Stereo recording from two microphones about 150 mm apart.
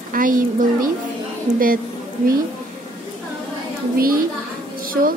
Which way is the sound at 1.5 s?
25° right (ahead or behind).